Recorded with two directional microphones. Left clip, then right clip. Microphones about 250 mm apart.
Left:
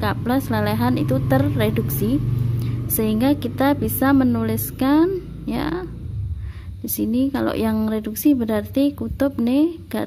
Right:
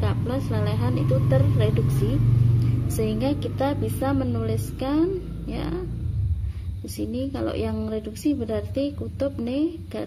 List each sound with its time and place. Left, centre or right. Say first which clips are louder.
0.0 s a woman's voice: left 7 dB; left
7.0 s a woman's voice: left 7 dB; left